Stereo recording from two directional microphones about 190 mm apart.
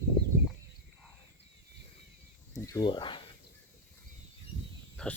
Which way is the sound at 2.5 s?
20° left (ahead or behind).